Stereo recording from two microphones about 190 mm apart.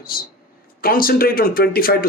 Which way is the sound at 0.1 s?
50° left (ahead or behind).